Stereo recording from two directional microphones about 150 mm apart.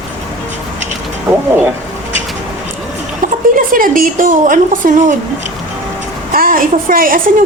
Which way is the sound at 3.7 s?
70° right (ahead or behind).